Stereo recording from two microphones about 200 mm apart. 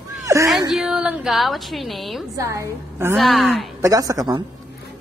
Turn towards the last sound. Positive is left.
turn(degrees=-20)  # may be behind; listen again after turning